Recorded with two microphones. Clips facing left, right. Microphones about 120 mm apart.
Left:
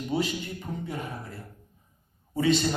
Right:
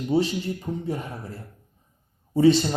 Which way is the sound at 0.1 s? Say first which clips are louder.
Right 6 dB; 30° right (ahead or behind).